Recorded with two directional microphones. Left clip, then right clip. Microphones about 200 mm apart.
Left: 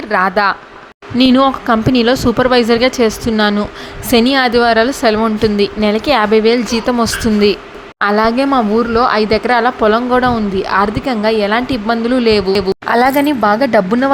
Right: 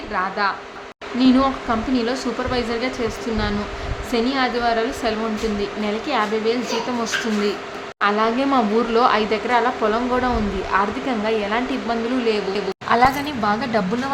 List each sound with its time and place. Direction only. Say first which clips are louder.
0.1 s speech: left 9 dB; 35° left (ahead or behind)
8.0 s speech: left 6 dB; 30° left (ahead or behind)